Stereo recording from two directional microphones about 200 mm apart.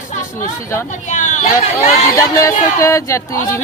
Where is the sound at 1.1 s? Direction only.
40° left (ahead or behind).